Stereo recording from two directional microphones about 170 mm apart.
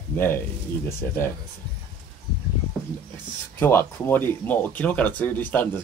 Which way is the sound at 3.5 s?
15° left (ahead or behind).